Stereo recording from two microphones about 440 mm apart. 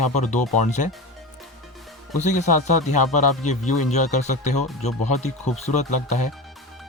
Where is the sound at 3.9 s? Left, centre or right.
Centre.